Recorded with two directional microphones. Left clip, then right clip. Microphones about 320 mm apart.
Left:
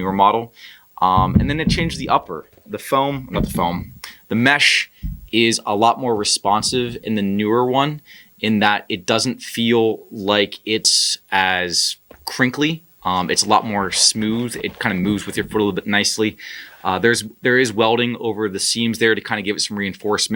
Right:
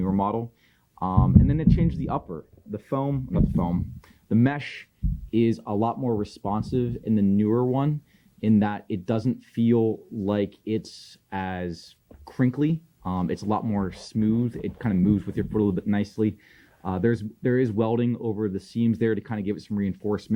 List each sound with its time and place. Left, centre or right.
0.0 s speech: centre